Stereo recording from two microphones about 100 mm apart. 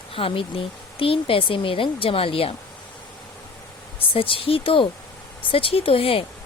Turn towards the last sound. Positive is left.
turn(degrees=75)  # may be behind; listen again after turning